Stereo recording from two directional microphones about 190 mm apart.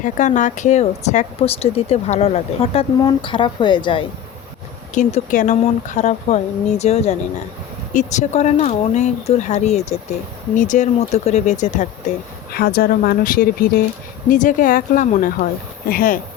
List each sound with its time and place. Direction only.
0.0 s a woman's voice: 40° left (ahead or behind)
4.9 s speech: 40° left (ahead or behind)
12.5 s speech: 55° left (ahead or behind)